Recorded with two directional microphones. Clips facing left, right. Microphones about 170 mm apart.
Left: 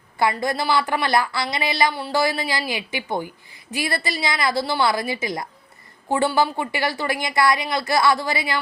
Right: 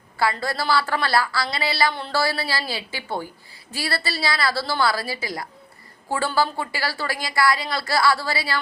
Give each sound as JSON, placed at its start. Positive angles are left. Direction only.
{"t": 0.2, "sound": "a woman's voice", "side_deg": 20}